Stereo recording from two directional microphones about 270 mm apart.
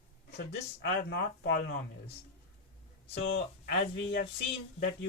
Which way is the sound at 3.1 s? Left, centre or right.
Left.